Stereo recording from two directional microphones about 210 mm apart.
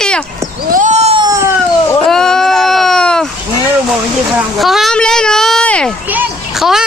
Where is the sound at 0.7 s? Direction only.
35° right (ahead or behind); by 1.4 s 15° right (ahead or behind).